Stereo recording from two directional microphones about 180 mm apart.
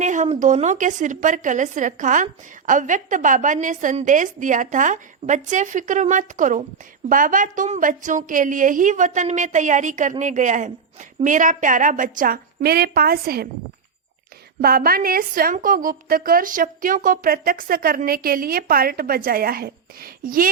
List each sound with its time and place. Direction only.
0.0 s speech: 45° right (ahead or behind)
14.6 s speech: 55° right (ahead or behind)